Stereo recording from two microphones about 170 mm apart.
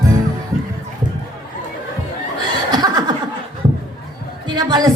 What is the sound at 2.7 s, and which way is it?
Chuckle, 25° right (ahead or behind).